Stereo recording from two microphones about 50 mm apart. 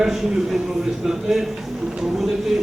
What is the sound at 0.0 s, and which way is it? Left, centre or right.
A man's voice, centre.